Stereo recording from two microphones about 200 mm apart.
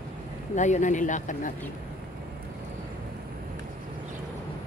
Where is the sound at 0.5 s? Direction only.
35° left (ahead or behind).